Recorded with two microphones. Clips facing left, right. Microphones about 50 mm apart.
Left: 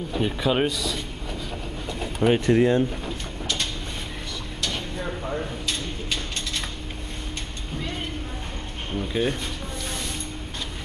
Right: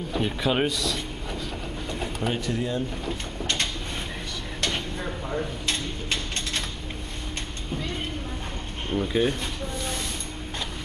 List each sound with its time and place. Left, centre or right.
0.1 s speech: centre
1.9 s bird: centre
2.4 s speech: left
4.6 s a sound: centre
8.9 s speech: centre